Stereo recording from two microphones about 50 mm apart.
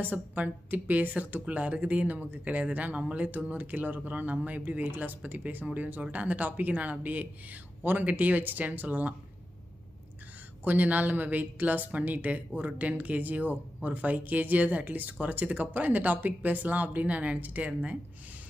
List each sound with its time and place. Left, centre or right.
0.0 s speech: right
10.6 s speech: right